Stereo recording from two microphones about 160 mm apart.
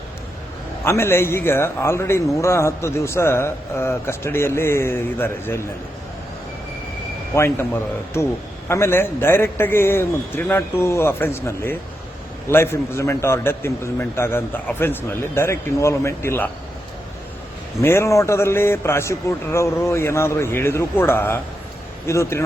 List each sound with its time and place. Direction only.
0.9 s a man's voice: 15° left (ahead or behind)
7.3 s a man's voice: 15° left (ahead or behind)
17.7 s a man's voice: 15° left (ahead or behind)